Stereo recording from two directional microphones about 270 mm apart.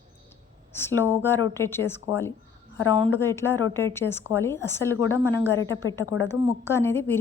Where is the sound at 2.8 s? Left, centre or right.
Centre.